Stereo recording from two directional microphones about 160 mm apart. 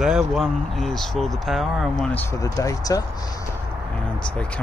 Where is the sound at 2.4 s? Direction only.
20° left (ahead or behind).